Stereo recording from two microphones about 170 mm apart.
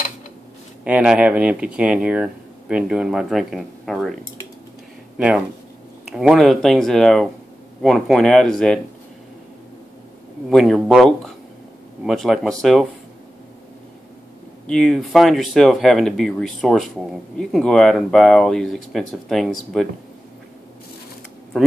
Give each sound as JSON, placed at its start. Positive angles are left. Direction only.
{"t": 0.8, "sound": "speech", "side_deg": -5}
{"t": 10.5, "sound": "speech", "side_deg": 0}
{"t": 14.7, "sound": "speech", "side_deg": 5}